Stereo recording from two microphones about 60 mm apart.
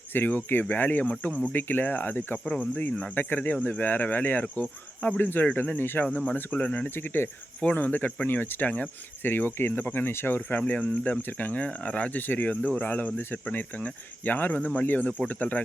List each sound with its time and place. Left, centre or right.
0.1 s speech: left
2.4 s cricket: centre
3.2 s speech: left
6.9 s speech: left
7.6 s speech: left
9.3 s speech: left